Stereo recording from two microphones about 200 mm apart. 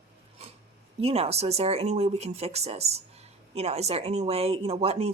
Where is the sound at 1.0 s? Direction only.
30° right (ahead or behind).